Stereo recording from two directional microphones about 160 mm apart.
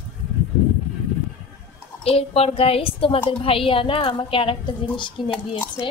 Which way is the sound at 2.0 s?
40° left (ahead or behind).